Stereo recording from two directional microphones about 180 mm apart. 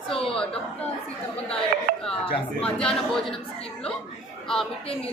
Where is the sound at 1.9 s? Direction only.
50° right (ahead or behind).